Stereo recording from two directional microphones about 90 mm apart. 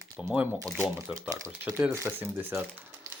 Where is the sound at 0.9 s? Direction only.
35° right (ahead or behind).